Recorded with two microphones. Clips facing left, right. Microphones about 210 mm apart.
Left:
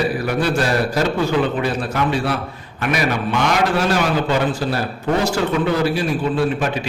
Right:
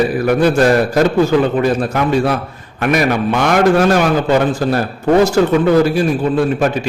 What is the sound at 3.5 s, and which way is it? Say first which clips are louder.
A man's voice: right 8 dB; 50° right (ahead or behind).